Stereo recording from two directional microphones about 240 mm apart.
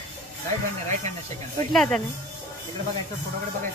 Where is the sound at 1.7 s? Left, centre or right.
Centre.